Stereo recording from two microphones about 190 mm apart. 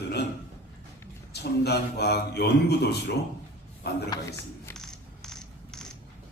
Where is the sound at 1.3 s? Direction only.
60° left (ahead or behind).